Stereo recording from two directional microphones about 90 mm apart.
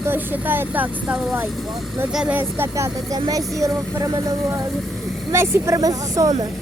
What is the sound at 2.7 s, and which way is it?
Speech, 40° right (ahead or behind).